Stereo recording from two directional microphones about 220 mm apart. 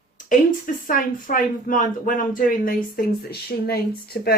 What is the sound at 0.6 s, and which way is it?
Speech, 40° left (ahead or behind).